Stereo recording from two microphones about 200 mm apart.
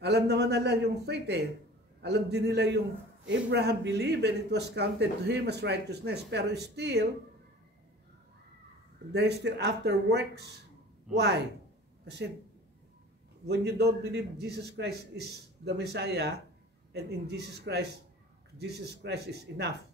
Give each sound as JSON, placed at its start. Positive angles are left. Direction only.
{"t": 0.0, "sound": "speech", "side_deg": -55}
{"t": 9.1, "sound": "speech", "side_deg": -55}
{"t": 13.5, "sound": "speech", "side_deg": -55}